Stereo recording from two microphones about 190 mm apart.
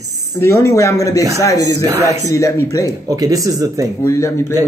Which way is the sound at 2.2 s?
15° left (ahead or behind).